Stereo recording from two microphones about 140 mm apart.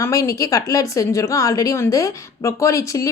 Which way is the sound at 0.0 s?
20° left (ahead or behind).